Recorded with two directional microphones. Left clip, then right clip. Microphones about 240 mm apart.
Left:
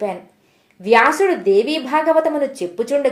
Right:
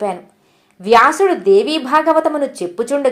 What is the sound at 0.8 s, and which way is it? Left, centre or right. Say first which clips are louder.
A woman's voice: right 3 dB; centre.